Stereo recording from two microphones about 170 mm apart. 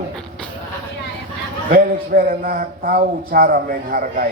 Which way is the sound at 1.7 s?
55° right (ahead or behind).